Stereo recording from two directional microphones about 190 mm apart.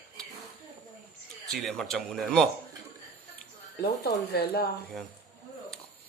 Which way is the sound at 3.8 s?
60° left (ahead or behind).